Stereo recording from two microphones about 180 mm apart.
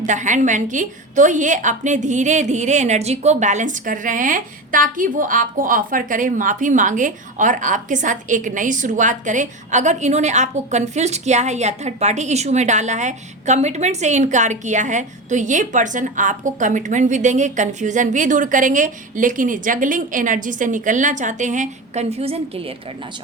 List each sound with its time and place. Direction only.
0.0 s a woman's voice: 45° right (ahead or behind)